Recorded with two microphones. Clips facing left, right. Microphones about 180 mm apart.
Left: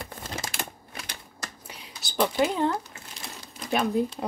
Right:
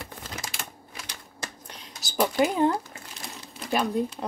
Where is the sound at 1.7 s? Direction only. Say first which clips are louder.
Even; 5° left (ahead or behind).